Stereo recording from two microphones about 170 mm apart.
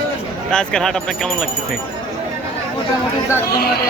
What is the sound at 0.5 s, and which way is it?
Speech, 5° left (ahead or behind).